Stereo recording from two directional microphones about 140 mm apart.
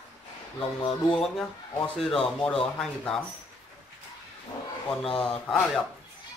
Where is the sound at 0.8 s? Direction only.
35° left (ahead or behind).